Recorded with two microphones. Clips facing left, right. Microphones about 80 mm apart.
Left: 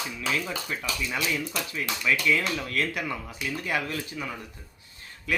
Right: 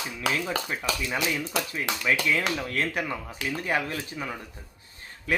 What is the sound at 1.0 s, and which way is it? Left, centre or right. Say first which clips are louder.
Speech: right 1 dB; centre.